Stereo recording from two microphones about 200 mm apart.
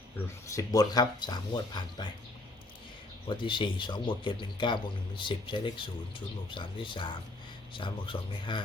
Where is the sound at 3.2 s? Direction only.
25° left (ahead or behind).